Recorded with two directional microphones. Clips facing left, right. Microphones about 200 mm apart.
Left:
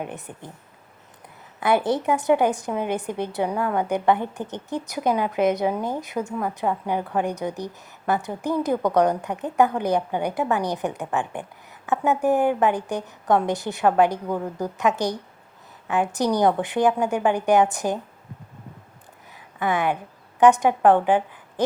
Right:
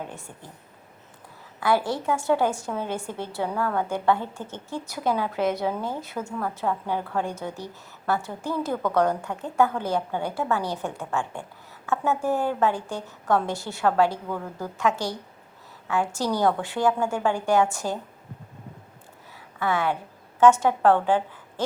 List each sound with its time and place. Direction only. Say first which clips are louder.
0.0 s a woman's voice: left 4 dB; 20° left (ahead or behind)
1.5 s a woman's voice: left 3 dB; 20° left (ahead or behind)
19.5 s a woman's voice: left 2 dB; 15° left (ahead or behind)